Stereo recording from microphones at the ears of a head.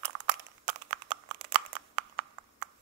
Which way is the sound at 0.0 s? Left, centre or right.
Right.